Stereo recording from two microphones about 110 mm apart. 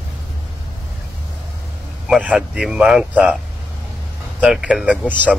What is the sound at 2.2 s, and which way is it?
Speech, 10° right (ahead or behind).